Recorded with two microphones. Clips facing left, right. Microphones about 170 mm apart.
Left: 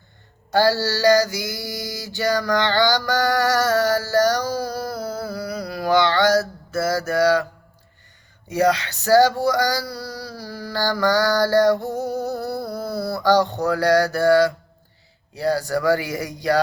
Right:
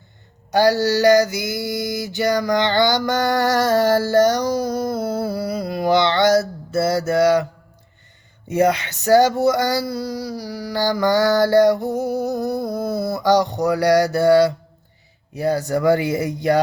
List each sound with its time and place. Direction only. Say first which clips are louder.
0.5 s mantra: right 3 dB; 15° right (ahead or behind)
8.4 s mantra: right 2 dB; 25° right (ahead or behind)